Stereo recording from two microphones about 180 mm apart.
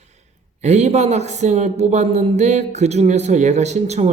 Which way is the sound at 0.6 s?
40° right (ahead or behind).